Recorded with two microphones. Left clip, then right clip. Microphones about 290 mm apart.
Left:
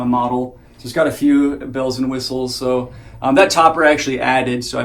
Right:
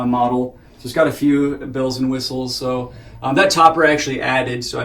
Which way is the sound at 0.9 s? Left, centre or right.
Left.